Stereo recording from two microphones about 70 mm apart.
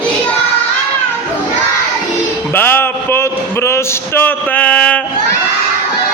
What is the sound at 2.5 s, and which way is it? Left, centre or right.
Speech, left.